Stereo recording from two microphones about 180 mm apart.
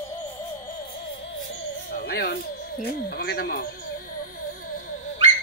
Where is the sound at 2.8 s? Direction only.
60° left (ahead or behind).